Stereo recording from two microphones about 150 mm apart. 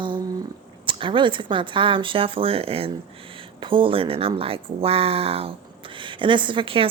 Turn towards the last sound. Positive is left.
turn(degrees=-35)  # may be behind; listen again after turning